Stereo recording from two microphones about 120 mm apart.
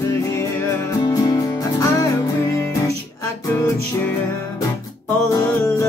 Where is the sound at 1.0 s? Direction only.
30° left (ahead or behind).